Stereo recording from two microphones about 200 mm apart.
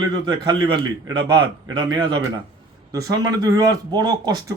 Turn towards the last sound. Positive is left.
turn(degrees=-20)  # may be behind; listen again after turning